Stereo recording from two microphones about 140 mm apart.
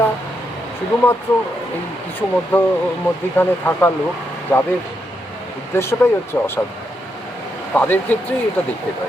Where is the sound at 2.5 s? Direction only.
15° left (ahead or behind).